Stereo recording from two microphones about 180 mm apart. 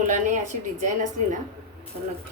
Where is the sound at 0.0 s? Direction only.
40° right (ahead or behind).